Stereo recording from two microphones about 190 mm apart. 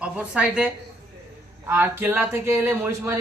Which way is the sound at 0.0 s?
5° right (ahead or behind).